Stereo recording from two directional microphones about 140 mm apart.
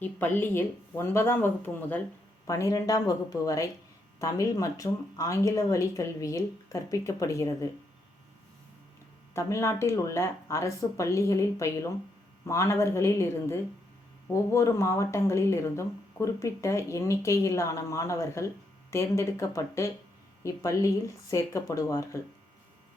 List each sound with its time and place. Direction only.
0.0 s speech: 15° left (ahead or behind)
9.3 s speech: 20° left (ahead or behind)